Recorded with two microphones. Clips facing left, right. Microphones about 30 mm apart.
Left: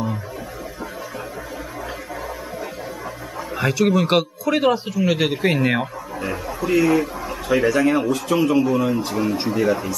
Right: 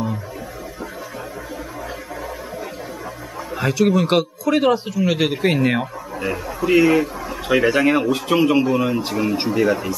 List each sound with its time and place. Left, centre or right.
3.5 s a man's voice: centre
6.7 s speech: right
9.1 s speech: centre